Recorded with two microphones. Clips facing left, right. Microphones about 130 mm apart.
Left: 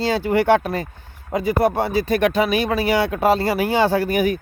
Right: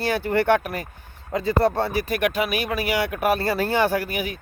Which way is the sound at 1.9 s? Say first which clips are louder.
Left 5 dB; 30° left (ahead or behind).